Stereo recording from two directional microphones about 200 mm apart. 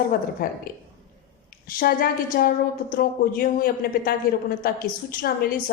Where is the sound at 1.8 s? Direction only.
45° left (ahead or behind).